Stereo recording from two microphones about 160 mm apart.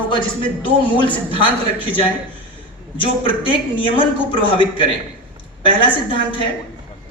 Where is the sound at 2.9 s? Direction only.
35° left (ahead or behind).